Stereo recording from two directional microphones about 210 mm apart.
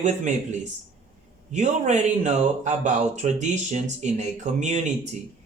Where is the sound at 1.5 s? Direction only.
35° right (ahead or behind).